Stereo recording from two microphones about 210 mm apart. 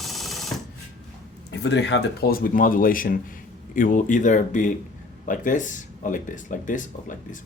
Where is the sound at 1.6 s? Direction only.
55° left (ahead or behind); by 6.9 s 35° left (ahead or behind).